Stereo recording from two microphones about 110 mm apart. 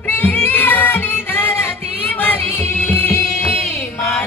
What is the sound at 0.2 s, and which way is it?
Child singing, 15° left (ahead or behind).